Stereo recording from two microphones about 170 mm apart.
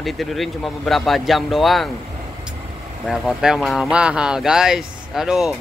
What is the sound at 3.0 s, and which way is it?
Speech, 5° right (ahead or behind).